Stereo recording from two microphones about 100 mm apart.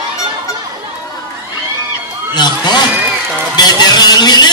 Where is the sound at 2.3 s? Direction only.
45° left (ahead or behind).